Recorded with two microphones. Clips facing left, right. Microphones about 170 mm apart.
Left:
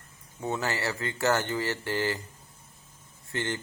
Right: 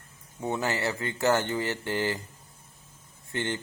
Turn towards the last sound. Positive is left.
turn(degrees=-20)  # may be behind; listen again after turning